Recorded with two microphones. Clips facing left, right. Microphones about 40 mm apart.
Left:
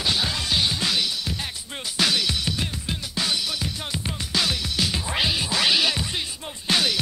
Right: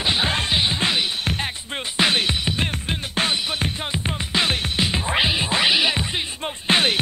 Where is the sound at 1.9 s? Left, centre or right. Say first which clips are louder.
Right 3 dB; right.